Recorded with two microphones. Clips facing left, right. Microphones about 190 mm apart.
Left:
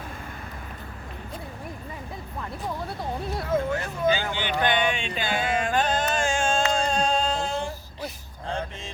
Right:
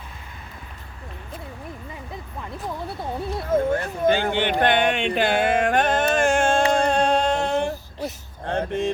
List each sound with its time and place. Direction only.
3.5 s speech: 50° right (ahead or behind)
6.7 s music: 60° right (ahead or behind)
8.4 s vehicle: 65° right (ahead or behind)